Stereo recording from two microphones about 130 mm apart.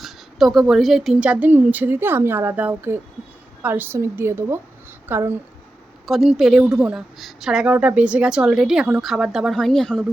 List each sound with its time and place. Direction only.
0.0 s a woman's voice: centre (ahead or behind); by 5.3 s 15° right (ahead or behind)
6.1 s a woman's voice: centre (ahead or behind)